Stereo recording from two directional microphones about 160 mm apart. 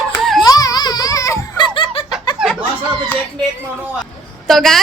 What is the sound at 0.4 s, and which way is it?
Giggle, 25° left (ahead or behind).